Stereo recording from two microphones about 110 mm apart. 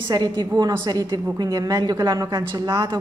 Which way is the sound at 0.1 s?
35° right (ahead or behind).